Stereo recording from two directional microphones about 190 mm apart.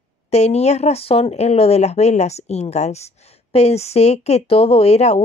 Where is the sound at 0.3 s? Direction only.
35° left (ahead or behind).